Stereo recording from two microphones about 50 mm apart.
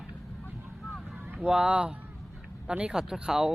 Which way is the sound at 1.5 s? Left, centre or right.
Centre.